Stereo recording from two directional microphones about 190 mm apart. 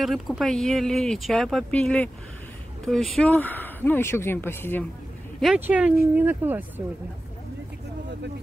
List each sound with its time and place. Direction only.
0.0 s speech: centre (ahead or behind)
5.4 s speech: 5° right (ahead or behind)